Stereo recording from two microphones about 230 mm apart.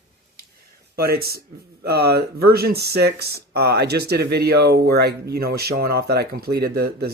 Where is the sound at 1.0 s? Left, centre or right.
Right.